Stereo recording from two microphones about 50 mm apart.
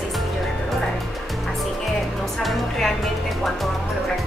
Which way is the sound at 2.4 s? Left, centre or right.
Centre.